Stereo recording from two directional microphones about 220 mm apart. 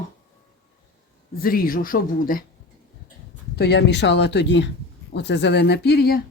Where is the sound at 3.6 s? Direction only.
50° left (ahead or behind).